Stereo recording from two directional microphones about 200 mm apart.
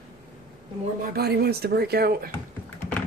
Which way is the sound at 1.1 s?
50° right (ahead or behind).